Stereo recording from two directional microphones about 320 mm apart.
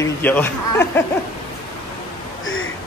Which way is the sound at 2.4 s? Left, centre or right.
Left.